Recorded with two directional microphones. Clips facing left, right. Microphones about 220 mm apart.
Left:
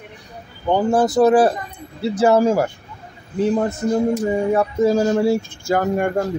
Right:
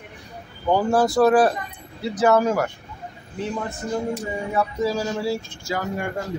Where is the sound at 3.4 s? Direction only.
40° left (ahead or behind).